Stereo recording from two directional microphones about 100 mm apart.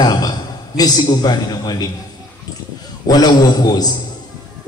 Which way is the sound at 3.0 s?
40° left (ahead or behind).